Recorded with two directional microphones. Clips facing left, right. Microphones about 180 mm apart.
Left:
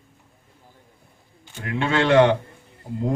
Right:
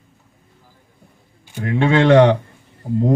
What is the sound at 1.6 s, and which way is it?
Speech, 45° right (ahead or behind).